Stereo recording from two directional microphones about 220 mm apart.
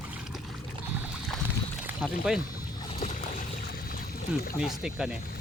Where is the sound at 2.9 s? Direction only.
35° left (ahead or behind).